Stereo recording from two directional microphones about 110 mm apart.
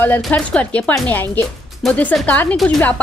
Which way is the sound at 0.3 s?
15° left (ahead or behind).